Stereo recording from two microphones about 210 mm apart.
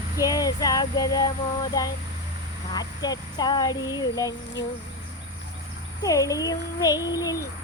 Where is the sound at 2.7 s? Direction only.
20° left (ahead or behind).